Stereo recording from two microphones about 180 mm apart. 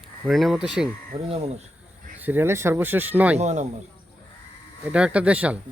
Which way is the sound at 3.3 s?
40° right (ahead or behind).